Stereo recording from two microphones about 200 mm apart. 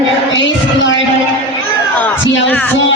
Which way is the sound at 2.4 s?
10° left (ahead or behind).